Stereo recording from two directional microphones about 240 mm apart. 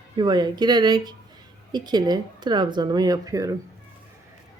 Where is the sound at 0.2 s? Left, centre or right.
Centre.